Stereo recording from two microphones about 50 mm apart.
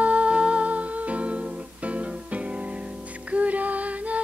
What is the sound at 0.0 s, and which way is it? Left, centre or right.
Music, right.